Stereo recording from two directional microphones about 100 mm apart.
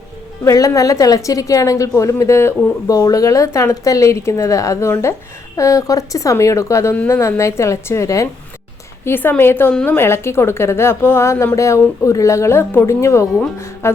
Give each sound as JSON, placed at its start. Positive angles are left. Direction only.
{"t": 0.4, "sound": "a woman's voice", "side_deg": 30}
{"t": 9.0, "sound": "a woman's voice", "side_deg": 20}